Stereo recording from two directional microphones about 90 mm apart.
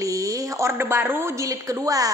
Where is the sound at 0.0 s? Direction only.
40° right (ahead or behind).